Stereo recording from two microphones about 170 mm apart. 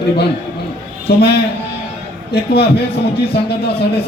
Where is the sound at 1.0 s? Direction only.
70° left (ahead or behind).